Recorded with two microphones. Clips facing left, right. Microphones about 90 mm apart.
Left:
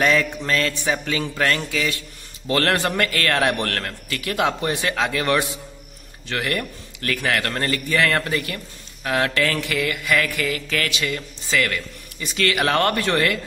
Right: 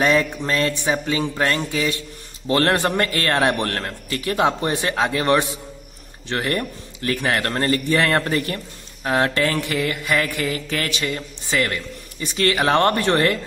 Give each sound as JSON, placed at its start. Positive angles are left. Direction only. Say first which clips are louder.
{"t": 0.4, "sound": "a man's voice", "louder": "right 1 dB", "side_deg": -25}
{"t": 9.0, "sound": "mantra", "louder": "right 2 dB", "side_deg": -30}